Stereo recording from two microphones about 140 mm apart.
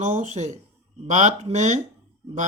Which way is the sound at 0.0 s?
55° right (ahead or behind).